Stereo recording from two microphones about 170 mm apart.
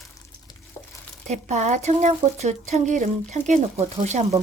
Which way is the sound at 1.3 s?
45° right (ahead or behind).